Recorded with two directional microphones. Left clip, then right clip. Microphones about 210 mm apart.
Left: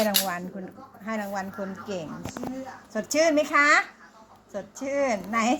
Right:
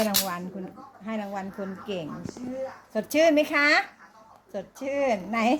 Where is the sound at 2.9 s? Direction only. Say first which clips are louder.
Right 1 dB; 15° right (ahead or behind).